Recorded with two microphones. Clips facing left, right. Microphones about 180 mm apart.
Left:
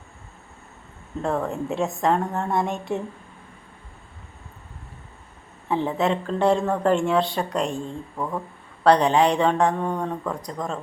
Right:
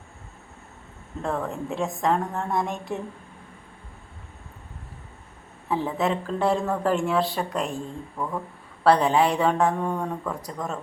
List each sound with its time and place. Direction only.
1.2 s a woman's voice: centre (ahead or behind)
5.6 s a woman's voice: 25° left (ahead or behind)
6.0 s a woman's voice: 5° right (ahead or behind)
8.8 s a woman's voice: 5° right (ahead or behind)